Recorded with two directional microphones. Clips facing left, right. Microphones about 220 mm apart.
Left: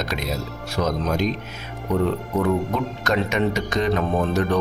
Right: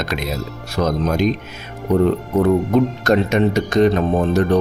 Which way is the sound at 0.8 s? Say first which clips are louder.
Right 4 dB; 55° right (ahead or behind).